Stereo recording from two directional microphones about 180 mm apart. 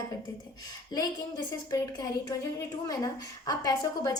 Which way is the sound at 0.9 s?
20° left (ahead or behind).